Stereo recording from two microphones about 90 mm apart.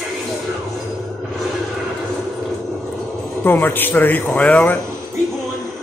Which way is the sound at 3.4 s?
20° left (ahead or behind).